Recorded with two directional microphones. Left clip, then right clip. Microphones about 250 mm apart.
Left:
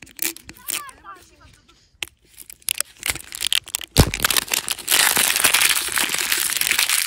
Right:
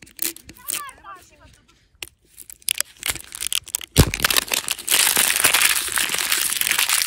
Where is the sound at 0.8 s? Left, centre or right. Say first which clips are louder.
Right 1 dB; right.